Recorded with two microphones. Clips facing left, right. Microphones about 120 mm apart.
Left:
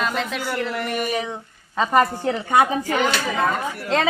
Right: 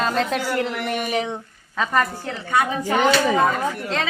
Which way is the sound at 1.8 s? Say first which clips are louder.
Left 3 dB; 25° left (ahead or behind).